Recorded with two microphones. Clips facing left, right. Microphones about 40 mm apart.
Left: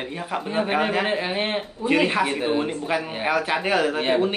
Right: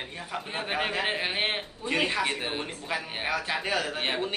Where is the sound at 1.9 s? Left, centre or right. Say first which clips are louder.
Left 7 dB; left.